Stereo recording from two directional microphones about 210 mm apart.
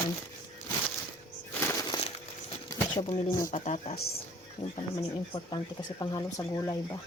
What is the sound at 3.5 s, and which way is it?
Speech, 30° left (ahead or behind).